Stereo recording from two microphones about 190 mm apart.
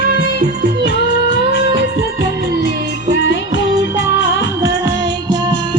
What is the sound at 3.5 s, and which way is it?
Music of bollywood, 75° left (ahead or behind).